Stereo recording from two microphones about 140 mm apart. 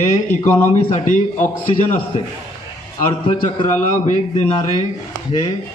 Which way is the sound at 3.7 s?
60° left (ahead or behind).